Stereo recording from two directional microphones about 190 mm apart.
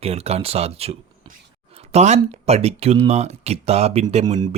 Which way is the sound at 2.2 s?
35° right (ahead or behind).